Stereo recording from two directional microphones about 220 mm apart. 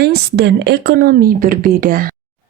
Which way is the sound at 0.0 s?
50° right (ahead or behind).